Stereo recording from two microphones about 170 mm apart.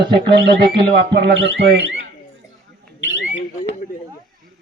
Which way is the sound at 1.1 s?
85° right.